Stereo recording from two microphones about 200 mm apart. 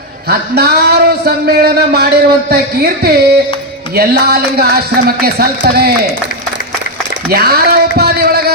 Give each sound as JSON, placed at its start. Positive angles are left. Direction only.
{"t": 0.3, "sound": "speech", "side_deg": -50}
{"t": 7.3, "sound": "speech", "side_deg": -50}